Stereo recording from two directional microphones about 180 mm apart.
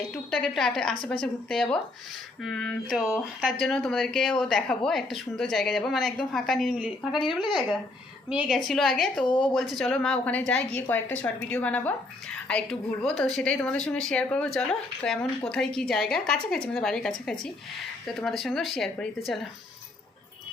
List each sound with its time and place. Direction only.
0.1 s speech: 5° left (ahead or behind)
9.2 s speech: 25° left (ahead or behind)
9.5 s a woman's voice: centre (ahead or behind)